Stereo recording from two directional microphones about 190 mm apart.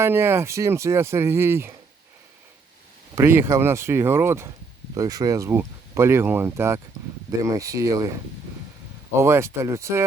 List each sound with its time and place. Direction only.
0.0 s speech: 10° right (ahead or behind)
3.2 s speech: 10° right (ahead or behind)
9.1 s speech: 15° right (ahead or behind)